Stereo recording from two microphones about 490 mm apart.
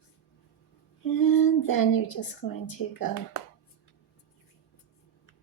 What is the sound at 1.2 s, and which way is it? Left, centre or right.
Female singing, left.